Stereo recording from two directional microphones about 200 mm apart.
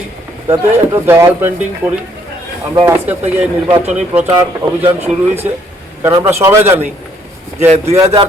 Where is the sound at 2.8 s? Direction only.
10° right (ahead or behind).